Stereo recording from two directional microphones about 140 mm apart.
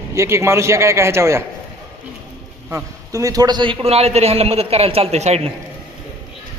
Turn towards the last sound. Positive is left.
turn(degrees=-50)  # may be behind; listen again after turning